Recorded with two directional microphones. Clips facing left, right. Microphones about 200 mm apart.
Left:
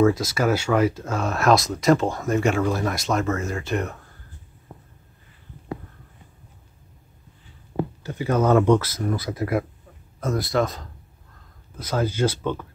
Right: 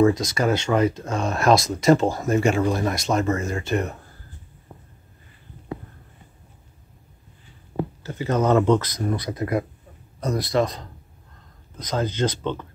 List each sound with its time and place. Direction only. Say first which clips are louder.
0.0 s speech: right 1 dB; 5° left (ahead or behind)
8.0 s speech: left 1 dB; 15° left (ahead or behind)